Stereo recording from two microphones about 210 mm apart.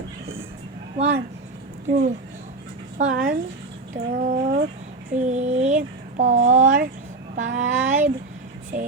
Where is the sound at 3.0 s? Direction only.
40° right (ahead or behind).